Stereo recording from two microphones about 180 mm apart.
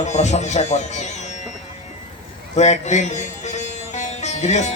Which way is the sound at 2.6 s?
40° left (ahead or behind).